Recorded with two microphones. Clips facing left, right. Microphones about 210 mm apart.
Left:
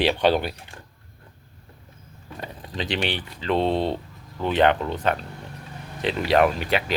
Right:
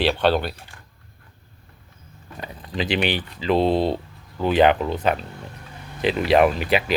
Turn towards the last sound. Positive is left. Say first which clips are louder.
# right 3 dB
turn(degrees=-5)  # may be behind; listen again after turning